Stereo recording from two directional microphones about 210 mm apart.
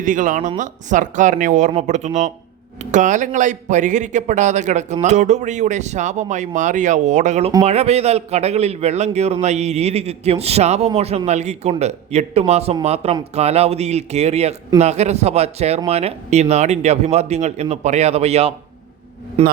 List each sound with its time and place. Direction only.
0.0 s a man's voice: 40° right (ahead or behind)